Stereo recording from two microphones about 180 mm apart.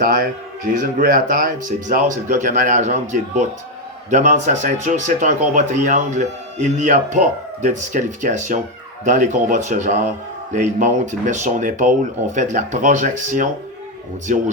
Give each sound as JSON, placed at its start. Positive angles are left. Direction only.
{"t": 0.7, "sound": "speech", "side_deg": -45}